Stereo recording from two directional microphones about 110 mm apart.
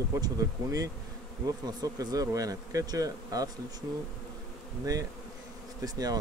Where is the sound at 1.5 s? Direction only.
35° right (ahead or behind).